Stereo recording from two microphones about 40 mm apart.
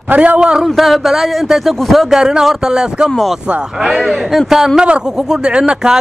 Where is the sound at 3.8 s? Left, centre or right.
Centre.